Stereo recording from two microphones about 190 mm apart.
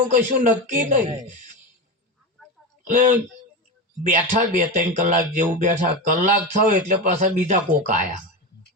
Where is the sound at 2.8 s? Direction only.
45° right (ahead or behind).